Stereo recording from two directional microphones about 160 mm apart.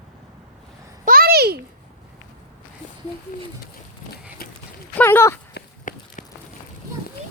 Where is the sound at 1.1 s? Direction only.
75° right (ahead or behind).